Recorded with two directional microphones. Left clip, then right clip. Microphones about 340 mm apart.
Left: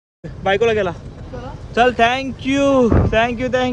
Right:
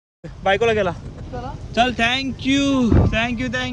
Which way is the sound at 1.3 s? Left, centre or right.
Centre.